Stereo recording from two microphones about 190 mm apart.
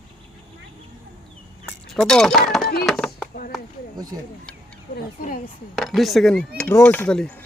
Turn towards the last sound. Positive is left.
turn(degrees=5)  # may be behind; listen again after turning